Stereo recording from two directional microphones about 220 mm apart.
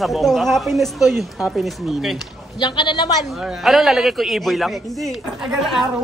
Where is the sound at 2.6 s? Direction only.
20° left (ahead or behind).